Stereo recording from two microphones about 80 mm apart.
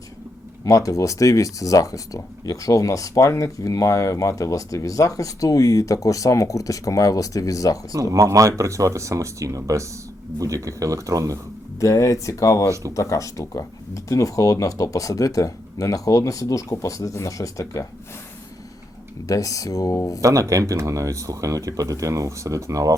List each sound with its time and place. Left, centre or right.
0.6 s speech: left
8.1 s speech: right
11.8 s speech: left
19.3 s speech: left
20.2 s speech: right